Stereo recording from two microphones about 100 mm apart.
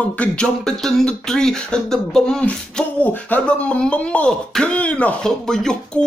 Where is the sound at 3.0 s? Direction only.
15° left (ahead or behind).